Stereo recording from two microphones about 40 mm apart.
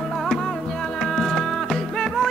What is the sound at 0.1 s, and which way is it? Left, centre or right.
Music, centre.